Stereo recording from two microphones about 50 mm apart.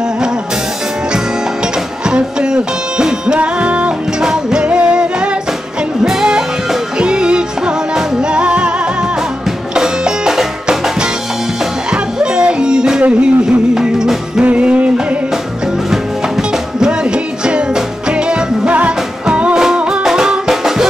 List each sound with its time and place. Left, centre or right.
2.0 s music: centre
3.3 s music: right
4.2 s music: centre
9.8 s music: centre
14.4 s music: right
16.8 s music: centre